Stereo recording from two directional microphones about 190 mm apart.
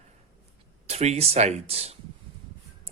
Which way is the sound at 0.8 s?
35° right (ahead or behind).